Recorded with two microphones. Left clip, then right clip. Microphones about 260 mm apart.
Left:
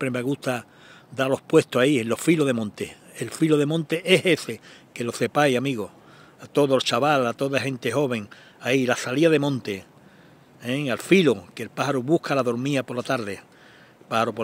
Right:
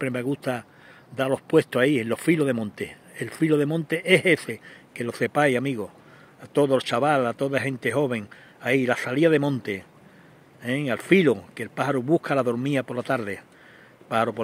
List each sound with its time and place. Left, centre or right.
0.0 s a man's voice: centre